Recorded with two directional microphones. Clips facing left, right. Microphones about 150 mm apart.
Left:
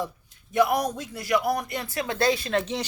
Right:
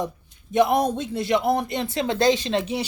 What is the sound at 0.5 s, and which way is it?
A woman's voice, 25° right (ahead or behind).